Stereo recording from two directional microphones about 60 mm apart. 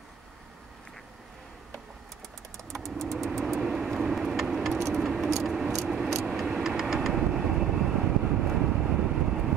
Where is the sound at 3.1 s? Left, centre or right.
Centre.